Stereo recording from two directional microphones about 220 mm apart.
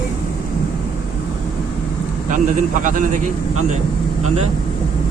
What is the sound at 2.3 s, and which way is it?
Speech, 35° right (ahead or behind).